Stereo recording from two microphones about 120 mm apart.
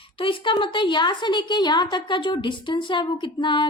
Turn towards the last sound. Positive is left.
turn(degrees=40)  # may be behind; listen again after turning